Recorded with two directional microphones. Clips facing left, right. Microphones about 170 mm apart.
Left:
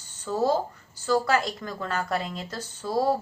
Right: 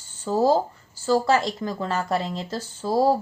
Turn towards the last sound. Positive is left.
turn(degrees=-30)  # may be behind; listen again after turning